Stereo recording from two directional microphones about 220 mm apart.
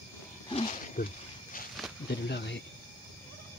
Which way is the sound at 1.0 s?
40° left (ahead or behind).